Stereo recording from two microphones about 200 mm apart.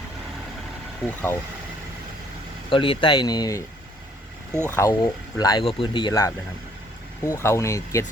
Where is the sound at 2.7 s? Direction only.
25° left (ahead or behind).